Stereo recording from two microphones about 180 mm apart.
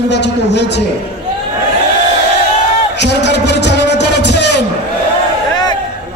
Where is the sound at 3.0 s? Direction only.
70° left (ahead or behind).